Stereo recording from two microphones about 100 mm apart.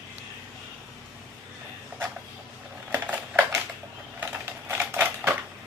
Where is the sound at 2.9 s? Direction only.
15° right (ahead or behind).